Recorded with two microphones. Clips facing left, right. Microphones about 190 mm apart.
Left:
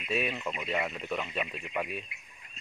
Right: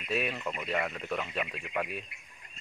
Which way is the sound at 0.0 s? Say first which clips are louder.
Even; centre (ahead or behind).